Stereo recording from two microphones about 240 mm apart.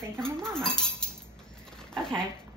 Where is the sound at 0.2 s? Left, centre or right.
Centre.